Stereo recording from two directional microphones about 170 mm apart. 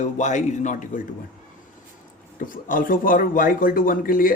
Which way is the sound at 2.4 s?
55° left (ahead or behind).